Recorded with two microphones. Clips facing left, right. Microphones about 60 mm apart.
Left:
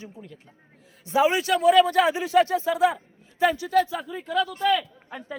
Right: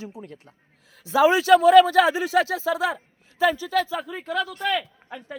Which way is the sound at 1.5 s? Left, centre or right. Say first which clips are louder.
Right 6 dB; right.